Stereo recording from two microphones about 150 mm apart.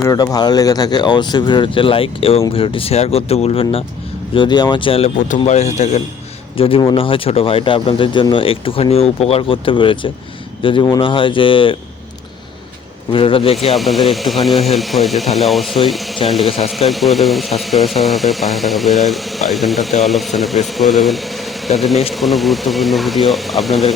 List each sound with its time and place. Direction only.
0.0 s speech: 20° left (ahead or behind); by 3.8 s 40° left (ahead or behind)
4.4 s speech: 30° left (ahead or behind)
5.5 s a man's voice: 50° left (ahead or behind)
6.6 s speech: 40° left (ahead or behind)
13.1 s speech: 35° left (ahead or behind)
13.7 s speech: centre (ahead or behind)